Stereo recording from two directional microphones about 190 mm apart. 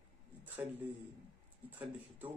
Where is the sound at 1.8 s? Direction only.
10° right (ahead or behind).